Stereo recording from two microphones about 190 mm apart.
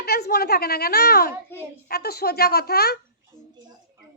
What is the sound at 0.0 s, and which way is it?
A woman's voice, 55° left (ahead or behind).